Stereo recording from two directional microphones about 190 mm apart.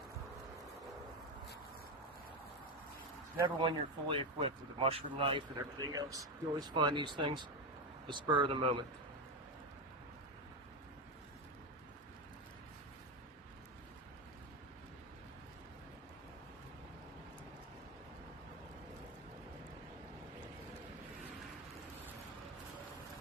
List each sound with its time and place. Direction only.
3.4 s speech: 25° right (ahead or behind)